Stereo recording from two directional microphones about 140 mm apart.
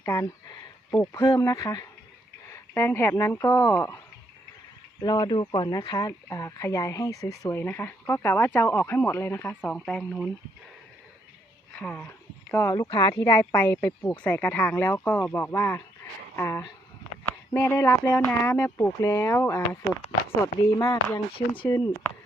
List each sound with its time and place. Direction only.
0.0 s a sound: 20° left (ahead or behind)
0.9 s speech: 20° left (ahead or behind)
4.9 s speech: 30° left (ahead or behind); by 10.0 s 10° left (ahead or behind)
10.0 s speech: 5° right (ahead or behind)
11.7 s speech: 5° left (ahead or behind)
21.3 s speech: 35° left (ahead or behind)